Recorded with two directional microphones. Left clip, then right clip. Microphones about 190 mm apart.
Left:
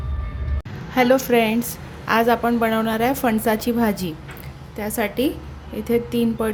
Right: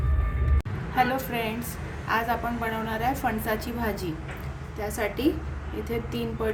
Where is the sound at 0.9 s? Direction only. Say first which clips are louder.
Left 9 dB; 45° left (ahead or behind).